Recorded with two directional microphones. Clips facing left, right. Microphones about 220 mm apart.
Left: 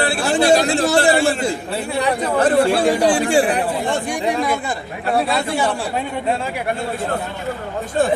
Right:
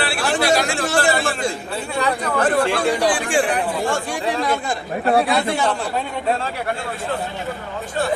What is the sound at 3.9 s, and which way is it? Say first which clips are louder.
A man's voice: left 2 dB; 15° left (ahead or behind).